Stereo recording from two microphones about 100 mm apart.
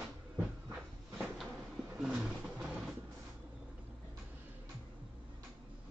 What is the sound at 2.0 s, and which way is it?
Roaring cats, 5° right (ahead or behind).